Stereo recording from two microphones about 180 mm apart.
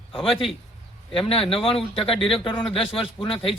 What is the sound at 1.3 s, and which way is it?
A man's voice, 30° left (ahead or behind).